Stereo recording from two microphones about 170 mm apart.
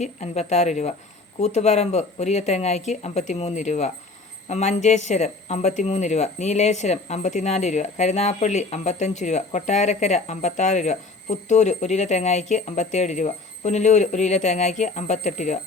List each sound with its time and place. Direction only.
0.0 s speech: 40° left (ahead or behind)